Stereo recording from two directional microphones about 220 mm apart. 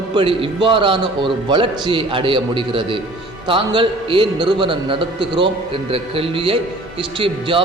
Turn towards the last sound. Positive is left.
turn(degrees=-25)  # may be behind; listen again after turning